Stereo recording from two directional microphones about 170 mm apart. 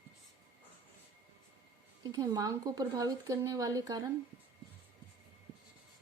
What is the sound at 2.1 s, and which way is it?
Speech, 20° right (ahead or behind).